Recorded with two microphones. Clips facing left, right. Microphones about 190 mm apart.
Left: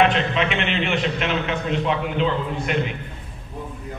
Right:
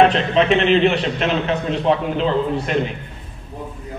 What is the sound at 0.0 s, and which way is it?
A man's voice, 35° right (ahead or behind).